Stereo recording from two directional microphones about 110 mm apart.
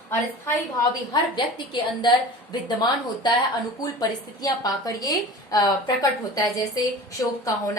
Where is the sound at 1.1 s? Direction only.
45° left (ahead or behind).